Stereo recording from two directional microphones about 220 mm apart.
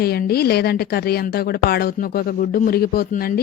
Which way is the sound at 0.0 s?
45° left (ahead or behind).